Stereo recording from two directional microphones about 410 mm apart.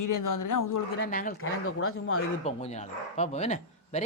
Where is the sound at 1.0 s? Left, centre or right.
Left.